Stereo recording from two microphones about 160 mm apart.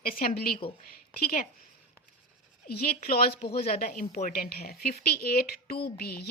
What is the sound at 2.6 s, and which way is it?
A woman's voice, 70° left (ahead or behind).